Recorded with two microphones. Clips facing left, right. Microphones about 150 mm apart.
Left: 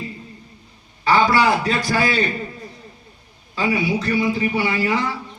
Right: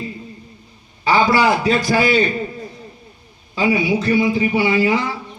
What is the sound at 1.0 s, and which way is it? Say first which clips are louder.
A man's voice: right 1 dB; 20° right (ahead or behind).